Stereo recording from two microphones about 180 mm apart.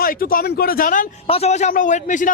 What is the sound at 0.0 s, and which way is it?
A man's voice, 55° left (ahead or behind).